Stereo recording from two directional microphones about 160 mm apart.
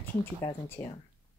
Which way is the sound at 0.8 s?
15° left (ahead or behind).